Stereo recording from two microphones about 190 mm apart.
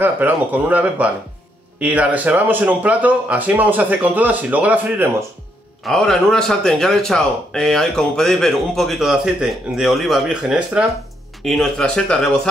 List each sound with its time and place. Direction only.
0.0 s speech: 10° right (ahead or behind)
5.9 s speech: centre (ahead or behind)